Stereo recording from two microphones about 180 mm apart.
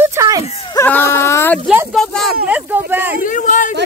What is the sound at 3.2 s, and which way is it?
Speech, 45° left (ahead or behind).